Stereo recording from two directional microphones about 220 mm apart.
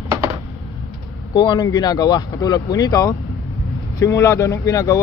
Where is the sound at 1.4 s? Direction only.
20° left (ahead or behind).